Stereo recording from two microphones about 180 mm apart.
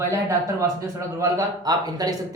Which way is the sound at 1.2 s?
20° right (ahead or behind).